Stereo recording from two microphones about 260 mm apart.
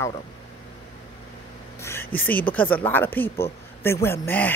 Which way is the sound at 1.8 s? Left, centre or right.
Centre.